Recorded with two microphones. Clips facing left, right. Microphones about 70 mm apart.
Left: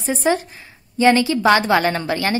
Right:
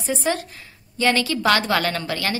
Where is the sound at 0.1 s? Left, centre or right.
Centre.